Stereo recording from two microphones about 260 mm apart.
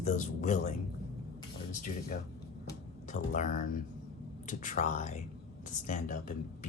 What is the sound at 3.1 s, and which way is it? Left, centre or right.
Speech, left.